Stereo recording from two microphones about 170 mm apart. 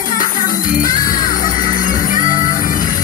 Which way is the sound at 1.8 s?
50° left (ahead or behind).